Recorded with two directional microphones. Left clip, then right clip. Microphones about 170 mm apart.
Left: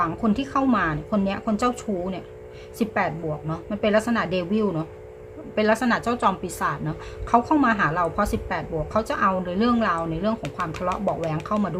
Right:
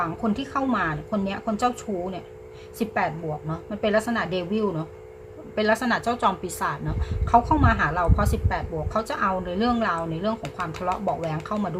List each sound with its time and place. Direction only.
0.0 s a woman's voice: 15° left (ahead or behind)